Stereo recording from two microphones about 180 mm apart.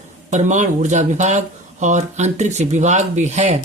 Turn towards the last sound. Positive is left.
turn(degrees=-40)  # may be behind; listen again after turning